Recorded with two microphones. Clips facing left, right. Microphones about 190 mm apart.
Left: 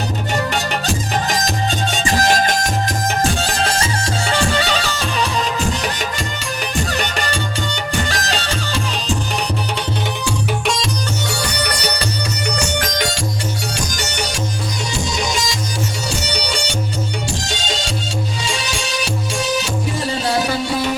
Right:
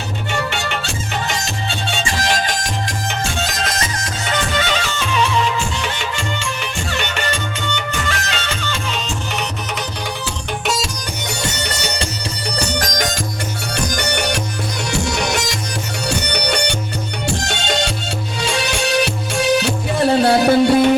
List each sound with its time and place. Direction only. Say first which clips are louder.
0.3 s music: left 2 dB; 40° left (ahead or behind)
3.4 s music: left 3 dB; 35° left (ahead or behind)
11.3 s music: left 2 dB; 20° right (ahead or behind)
12.5 s music: right 2 dB; 40° right (ahead or behind)
13.7 s music: right 3 dB; 60° right (ahead or behind)